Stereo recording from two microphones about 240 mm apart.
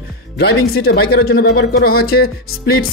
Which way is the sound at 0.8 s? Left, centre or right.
Left.